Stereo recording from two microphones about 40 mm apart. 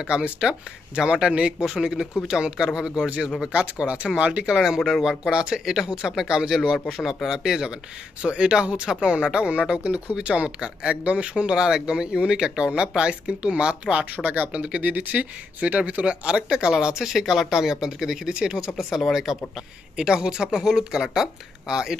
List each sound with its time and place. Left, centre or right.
0.0 s speech: right
3.5 s speech: right
4.5 s speech: centre
6.9 s speech: centre
7.3 s speech: centre
9.8 s speech: right
10.1 s speech: right
14.5 s speech: right
18.8 s speech: centre
20.0 s speech: right